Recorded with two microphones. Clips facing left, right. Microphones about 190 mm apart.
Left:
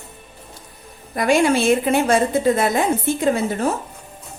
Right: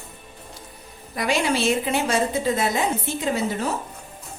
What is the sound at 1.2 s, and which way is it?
A woman's voice, 50° left (ahead or behind).